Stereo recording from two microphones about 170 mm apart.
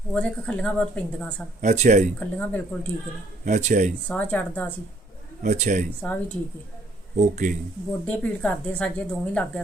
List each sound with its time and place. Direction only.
0.1 s a woman's voice: 5° left (ahead or behind)
1.6 s speech: 45° right (ahead or behind)
2.1 s a woman's voice: 10° left (ahead or behind)
3.4 s speech: 45° right (ahead or behind)
4.1 s a woman's voice: 10° left (ahead or behind)
5.4 s speech: 45° right (ahead or behind)
6.0 s a woman's voice: 10° left (ahead or behind)
7.2 s speech: 45° right (ahead or behind)
8.0 s a woman's voice: 10° left (ahead or behind)